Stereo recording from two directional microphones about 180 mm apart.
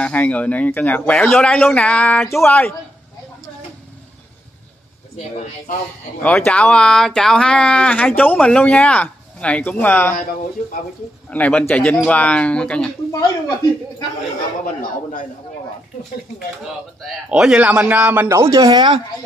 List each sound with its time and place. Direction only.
0.0 s speech: 5° left (ahead or behind)
6.2 s speech: 5° left (ahead or behind)
11.2 s speech: 5° left (ahead or behind)
13.1 s speech: 20° left (ahead or behind)
17.0 s a man's voice: 5° right (ahead or behind); by 18.9 s 20° right (ahead or behind)